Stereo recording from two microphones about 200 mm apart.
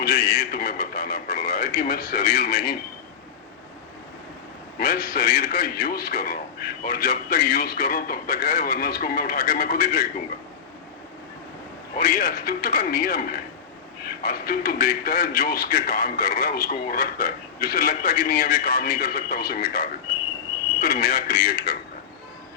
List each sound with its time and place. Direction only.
0.0 s speech: 40° left (ahead or behind)
4.8 s a man's voice: 45° left (ahead or behind)
11.9 s a man's voice: 40° left (ahead or behind)